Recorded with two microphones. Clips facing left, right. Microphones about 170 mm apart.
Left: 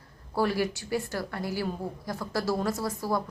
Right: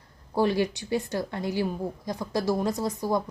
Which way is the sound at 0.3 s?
20° right (ahead or behind).